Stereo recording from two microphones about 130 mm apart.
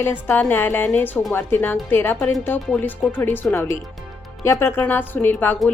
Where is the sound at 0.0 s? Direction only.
15° left (ahead or behind).